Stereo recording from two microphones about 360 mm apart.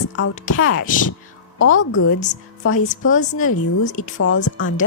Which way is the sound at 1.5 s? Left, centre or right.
Left.